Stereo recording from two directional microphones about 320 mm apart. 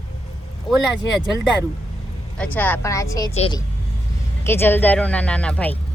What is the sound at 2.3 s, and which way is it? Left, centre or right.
A woman's voice, centre.